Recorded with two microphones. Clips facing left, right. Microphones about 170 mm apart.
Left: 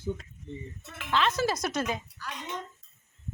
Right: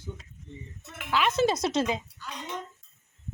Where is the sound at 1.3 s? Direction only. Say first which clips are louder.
Right 4 dB; 25° right (ahead or behind).